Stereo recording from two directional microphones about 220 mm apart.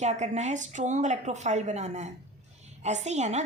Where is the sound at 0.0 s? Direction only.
30° right (ahead or behind).